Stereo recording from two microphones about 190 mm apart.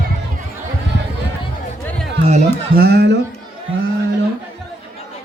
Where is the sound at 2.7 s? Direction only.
55° right (ahead or behind).